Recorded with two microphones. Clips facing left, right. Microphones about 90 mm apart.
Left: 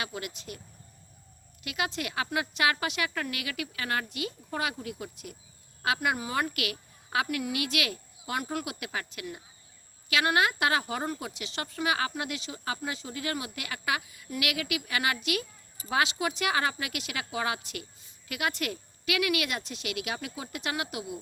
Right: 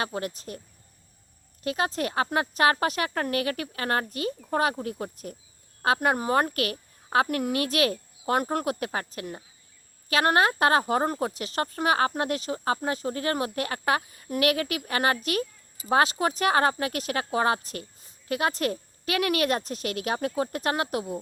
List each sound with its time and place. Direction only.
0.0 s speech: 35° right (ahead or behind)
1.6 s speech: 35° right (ahead or behind)